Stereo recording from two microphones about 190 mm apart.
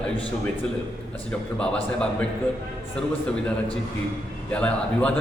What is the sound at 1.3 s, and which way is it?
Speech, 5° left (ahead or behind).